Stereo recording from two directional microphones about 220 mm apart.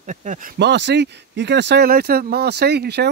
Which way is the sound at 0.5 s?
50° right (ahead or behind).